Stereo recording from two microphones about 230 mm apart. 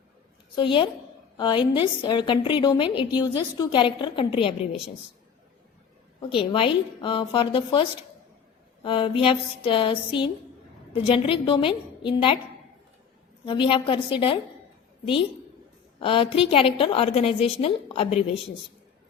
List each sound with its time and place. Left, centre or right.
0.5 s a woman's voice: left
6.3 s a woman's voice: left
13.4 s a woman's voice: left